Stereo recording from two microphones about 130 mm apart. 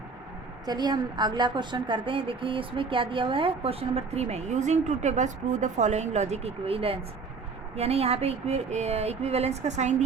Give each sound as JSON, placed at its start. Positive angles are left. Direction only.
{"t": 0.6, "sound": "a woman's voice", "side_deg": -30}